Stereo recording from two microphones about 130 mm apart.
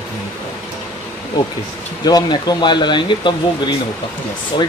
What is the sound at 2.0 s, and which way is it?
Speech, 30° left (ahead or behind).